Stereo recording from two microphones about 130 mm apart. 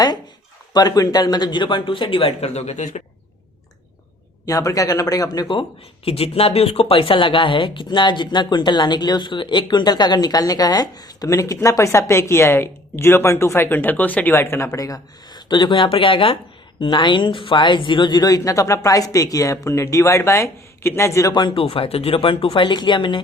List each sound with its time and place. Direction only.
0.7 s speech: 30° left (ahead or behind); by 3.0 s 65° left (ahead or behind)
4.4 s speech: 25° left (ahead or behind)
6.1 s speech: 50° left (ahead or behind)